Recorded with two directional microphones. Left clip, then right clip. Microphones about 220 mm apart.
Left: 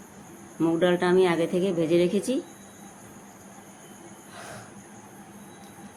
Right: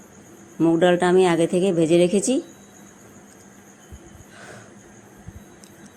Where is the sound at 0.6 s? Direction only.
25° right (ahead or behind).